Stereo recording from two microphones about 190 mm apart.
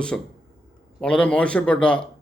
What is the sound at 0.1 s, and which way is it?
Speech, 5° left (ahead or behind).